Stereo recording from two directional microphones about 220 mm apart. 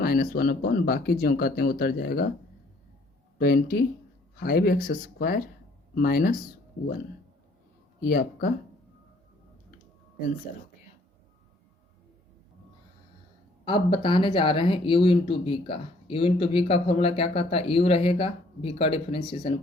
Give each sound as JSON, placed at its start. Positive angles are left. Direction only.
{"t": 0.0, "sound": "speech", "side_deg": 40}
{"t": 3.3, "sound": "speech", "side_deg": 40}
{"t": 8.0, "sound": "speech", "side_deg": 40}
{"t": 13.7, "sound": "speech", "side_deg": 20}